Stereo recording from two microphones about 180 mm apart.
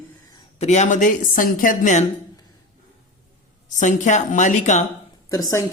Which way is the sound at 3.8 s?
45° left (ahead or behind).